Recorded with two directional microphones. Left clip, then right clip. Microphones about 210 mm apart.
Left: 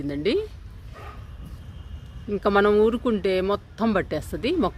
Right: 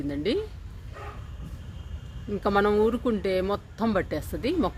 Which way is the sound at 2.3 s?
50° left (ahead or behind).